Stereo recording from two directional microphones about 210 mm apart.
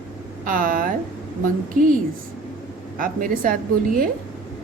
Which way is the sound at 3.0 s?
40° right (ahead or behind).